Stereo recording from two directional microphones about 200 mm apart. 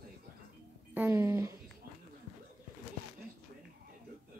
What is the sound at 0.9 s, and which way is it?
Speech, 15° right (ahead or behind).